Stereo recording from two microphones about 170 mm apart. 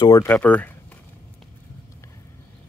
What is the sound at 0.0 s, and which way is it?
Speech, 20° left (ahead or behind).